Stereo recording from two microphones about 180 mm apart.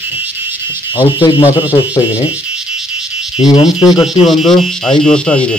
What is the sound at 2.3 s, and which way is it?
Toothbrush, 5° right (ahead or behind).